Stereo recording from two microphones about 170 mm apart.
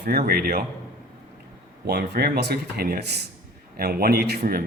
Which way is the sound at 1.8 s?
70° right (ahead or behind).